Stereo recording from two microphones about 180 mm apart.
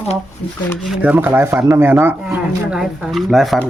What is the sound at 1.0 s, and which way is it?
Speech, 10° right (ahead or behind).